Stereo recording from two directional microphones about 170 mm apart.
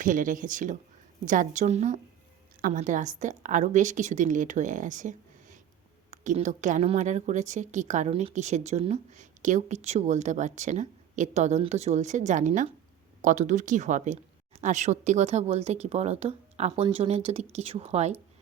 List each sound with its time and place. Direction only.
0.0 s a woman's voice: 50° right (ahead or behind)